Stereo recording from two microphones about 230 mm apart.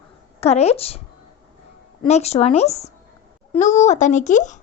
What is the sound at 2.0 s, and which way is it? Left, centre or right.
A woman's voice, left.